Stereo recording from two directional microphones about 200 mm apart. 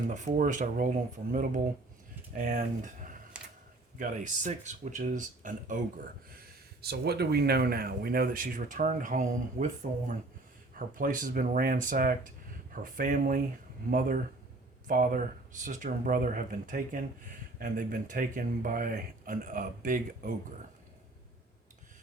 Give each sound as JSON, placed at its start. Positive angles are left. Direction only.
{"t": 0.1, "sound": "speech", "side_deg": -40}
{"t": 6.8, "sound": "speech", "side_deg": -55}
{"t": 10.8, "sound": "speech", "side_deg": -45}
{"t": 14.8, "sound": "speech", "side_deg": -40}